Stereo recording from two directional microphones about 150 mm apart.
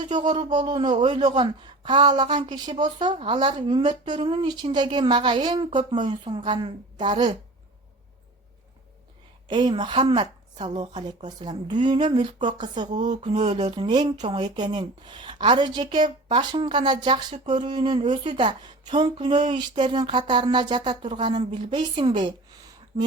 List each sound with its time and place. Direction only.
0.0 s a man's voice: 30° right (ahead or behind)
9.5 s a man's voice: 30° right (ahead or behind)
13.2 s mantra: 50° right (ahead or behind)
13.7 s a man's voice: 30° right (ahead or behind)